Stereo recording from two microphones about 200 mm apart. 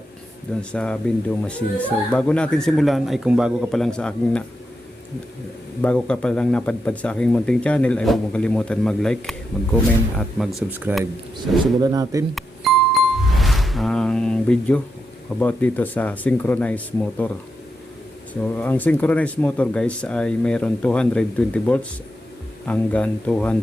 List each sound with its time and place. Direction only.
0.7 s speech: 5° left (ahead or behind)
5.8 s speech: 5° left (ahead or behind); by 12.2 s 15° right (ahead or behind)
12.3 s music: centre (ahead or behind)
15.4 s speech: 10° left (ahead or behind)
18.4 s speech: 10° left (ahead or behind)